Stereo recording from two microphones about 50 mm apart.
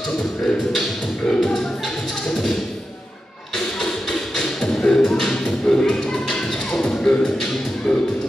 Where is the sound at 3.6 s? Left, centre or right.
Centre.